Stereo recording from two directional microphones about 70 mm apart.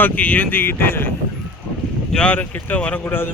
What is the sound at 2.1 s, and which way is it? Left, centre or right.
Speech, centre.